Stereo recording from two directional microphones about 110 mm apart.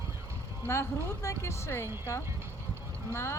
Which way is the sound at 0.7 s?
25° left (ahead or behind).